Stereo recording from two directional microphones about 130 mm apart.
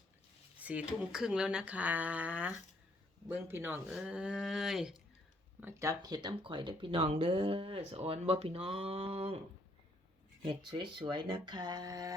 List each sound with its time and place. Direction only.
0.6 s speech: 10° right (ahead or behind)
3.9 s a sound: 5° right (ahead or behind)
5.5 s speech: 20° right (ahead or behind); by 9.4 s 45° right (ahead or behind)
10.4 s speech: 35° right (ahead or behind)